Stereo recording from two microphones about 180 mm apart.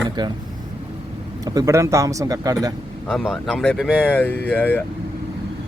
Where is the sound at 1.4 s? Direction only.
20° right (ahead or behind).